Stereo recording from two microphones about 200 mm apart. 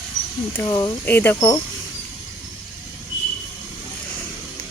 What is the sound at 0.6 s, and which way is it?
Speech, 20° left (ahead or behind).